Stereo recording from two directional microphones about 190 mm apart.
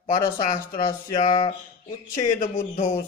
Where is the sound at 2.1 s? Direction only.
45° left (ahead or behind).